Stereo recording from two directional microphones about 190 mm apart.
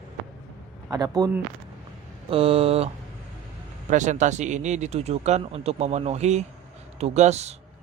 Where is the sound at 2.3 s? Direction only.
30° right (ahead or behind).